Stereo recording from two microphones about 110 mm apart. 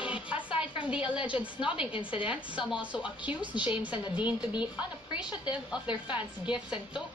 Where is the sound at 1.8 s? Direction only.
10° right (ahead or behind).